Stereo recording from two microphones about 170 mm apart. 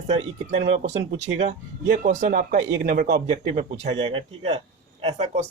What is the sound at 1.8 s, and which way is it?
Speech, 65° right (ahead or behind).